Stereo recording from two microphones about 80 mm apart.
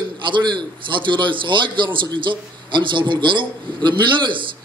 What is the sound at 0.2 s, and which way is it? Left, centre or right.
A man's voice, right.